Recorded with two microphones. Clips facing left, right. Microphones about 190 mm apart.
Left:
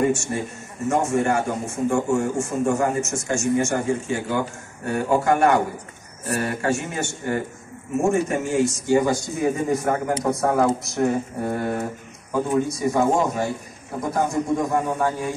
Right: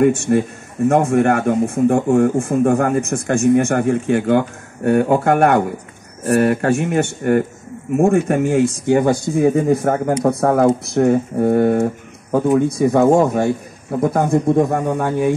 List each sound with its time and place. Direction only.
0.0 s speech: 60° right (ahead or behind)